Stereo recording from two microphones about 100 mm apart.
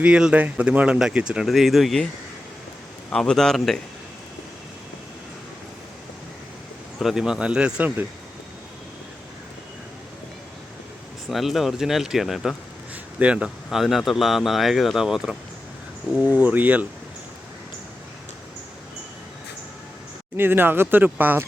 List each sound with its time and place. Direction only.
0.0 s speech: 10° right (ahead or behind)
3.1 s speech: 5° left (ahead or behind)
7.0 s speech: 5° right (ahead or behind)
11.3 s speech: centre (ahead or behind)
16.1 s speech: 15° right (ahead or behind)
20.3 s speech: 20° right (ahead or behind)